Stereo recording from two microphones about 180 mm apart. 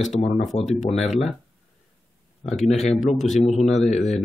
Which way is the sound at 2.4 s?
Centre (ahead or behind).